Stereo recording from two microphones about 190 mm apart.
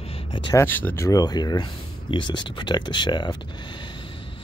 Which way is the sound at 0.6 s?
10° left (ahead or behind).